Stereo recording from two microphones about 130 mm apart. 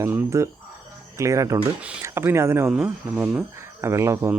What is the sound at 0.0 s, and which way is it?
Speech, 20° right (ahead or behind).